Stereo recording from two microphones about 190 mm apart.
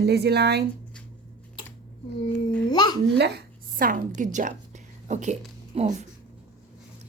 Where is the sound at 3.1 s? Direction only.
60° right (ahead or behind); by 5.9 s 35° right (ahead or behind).